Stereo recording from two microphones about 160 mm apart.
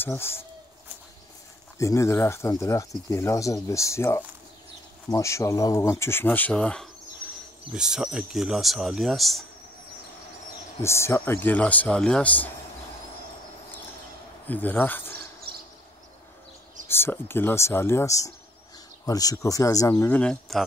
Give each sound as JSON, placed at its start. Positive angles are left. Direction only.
{"t": 0.0, "sound": "speech", "side_deg": 15}
{"t": 1.8, "sound": "speech", "side_deg": 20}
{"t": 10.8, "sound": "speech", "side_deg": 15}
{"t": 14.5, "sound": "speech", "side_deg": 10}
{"t": 16.8, "sound": "speech", "side_deg": 15}